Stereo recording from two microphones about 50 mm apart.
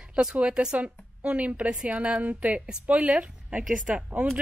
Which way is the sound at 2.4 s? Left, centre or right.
Right.